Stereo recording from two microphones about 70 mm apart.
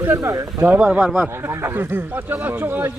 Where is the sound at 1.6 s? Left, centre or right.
Right.